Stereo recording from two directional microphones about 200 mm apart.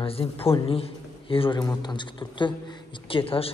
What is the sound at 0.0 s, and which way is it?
A man's voice, 30° left (ahead or behind).